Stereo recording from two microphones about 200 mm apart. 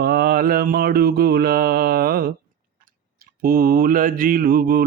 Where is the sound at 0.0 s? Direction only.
50° right (ahead or behind).